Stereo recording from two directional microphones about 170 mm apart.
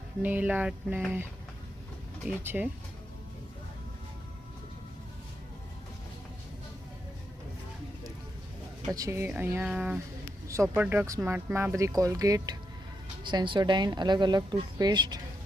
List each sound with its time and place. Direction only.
0.2 s speech: 10° right (ahead or behind)
2.4 s speech: 10° right (ahead or behind)
8.9 s speech: 20° right (ahead or behind)